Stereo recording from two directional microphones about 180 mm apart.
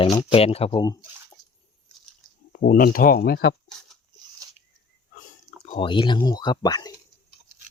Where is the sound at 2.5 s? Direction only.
55° left (ahead or behind).